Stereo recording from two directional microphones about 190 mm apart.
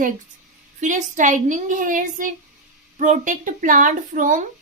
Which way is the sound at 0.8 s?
40° right (ahead or behind).